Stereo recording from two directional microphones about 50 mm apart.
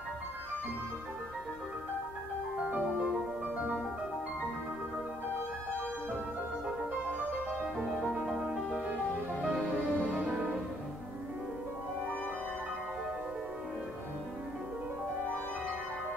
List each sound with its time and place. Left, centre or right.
2.7 s music: right
8.1 s music: centre
9.9 s music: right